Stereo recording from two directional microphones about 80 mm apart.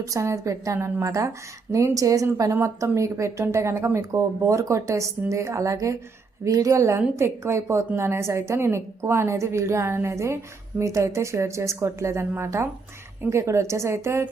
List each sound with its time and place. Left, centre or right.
0.0 s a woman's voice: right